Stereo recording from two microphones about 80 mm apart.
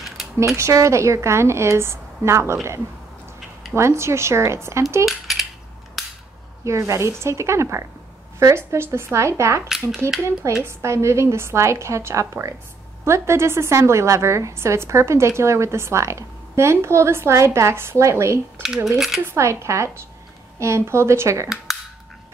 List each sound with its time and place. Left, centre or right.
0.6 s a woman's voice: right
5.0 s cutlery: centre
6.0 s cap gun: centre
6.6 s a woman's voice: right
9.7 s speech: centre
10.6 s a woman's voice: right
18.9 s speech: centre
19.2 s a woman's voice: right
21.7 s finger snapping: centre